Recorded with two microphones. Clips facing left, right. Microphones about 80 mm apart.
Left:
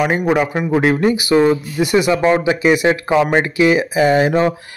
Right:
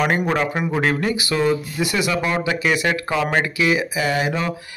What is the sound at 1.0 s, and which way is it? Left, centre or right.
Speech, left.